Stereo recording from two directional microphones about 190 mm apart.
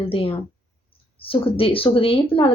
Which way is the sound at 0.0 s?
30° left (ahead or behind).